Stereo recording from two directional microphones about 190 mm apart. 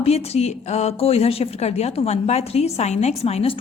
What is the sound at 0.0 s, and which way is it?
A woman's voice, 35° left (ahead or behind).